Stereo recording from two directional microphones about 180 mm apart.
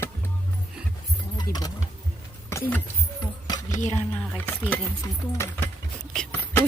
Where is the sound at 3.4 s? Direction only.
20° left (ahead or behind).